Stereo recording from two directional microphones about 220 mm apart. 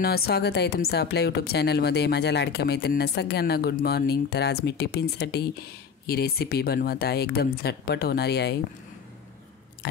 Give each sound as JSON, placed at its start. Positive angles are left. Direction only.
{"t": 0.0, "sound": "speech", "side_deg": 45}